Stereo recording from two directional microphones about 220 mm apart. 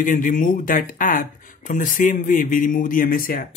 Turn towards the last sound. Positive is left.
turn(degrees=40)  # may be behind; listen again after turning